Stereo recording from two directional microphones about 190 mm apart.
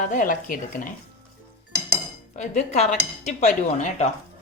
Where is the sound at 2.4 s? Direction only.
35° left (ahead or behind).